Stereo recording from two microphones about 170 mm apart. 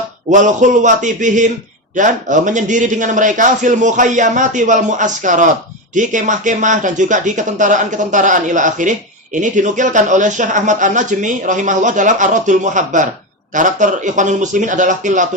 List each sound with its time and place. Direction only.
0.3 s speech: 45° right (ahead or behind)